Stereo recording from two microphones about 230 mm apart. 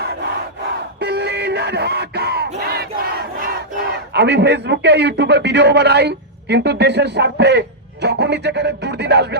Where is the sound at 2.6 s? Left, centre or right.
Right.